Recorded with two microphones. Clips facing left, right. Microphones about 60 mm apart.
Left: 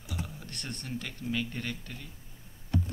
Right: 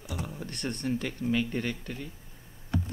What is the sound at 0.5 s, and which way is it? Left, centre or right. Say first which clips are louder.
A man's voice: right 8 dB; centre.